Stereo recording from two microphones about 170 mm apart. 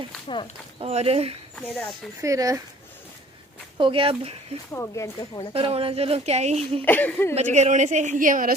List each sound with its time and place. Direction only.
0.8 s a woman's voice: 35° right (ahead or behind)
1.6 s speech: 5° left (ahead or behind)
2.2 s speech: 20° right (ahead or behind)
3.8 s a woman's voice: 30° right (ahead or behind)
4.7 s speech: 15° left (ahead or behind)
5.5 s a woman's voice: 35° right (ahead or behind)
6.8 s speech: 10° left (ahead or behind)
7.3 s a woman's voice: 40° right (ahead or behind)